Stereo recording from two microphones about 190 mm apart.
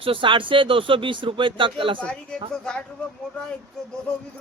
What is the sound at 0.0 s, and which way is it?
A man's voice, 25° right (ahead or behind).